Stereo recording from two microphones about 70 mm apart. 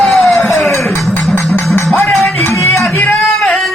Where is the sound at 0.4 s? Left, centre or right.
Centre.